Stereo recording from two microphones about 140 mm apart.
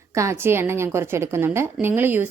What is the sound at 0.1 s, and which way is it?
A woman's voice, 20° right (ahead or behind).